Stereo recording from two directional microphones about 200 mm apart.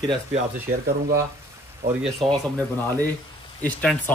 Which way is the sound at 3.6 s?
10° left (ahead or behind).